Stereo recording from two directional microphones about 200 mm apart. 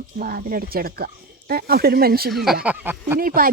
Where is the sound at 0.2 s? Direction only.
45° right (ahead or behind).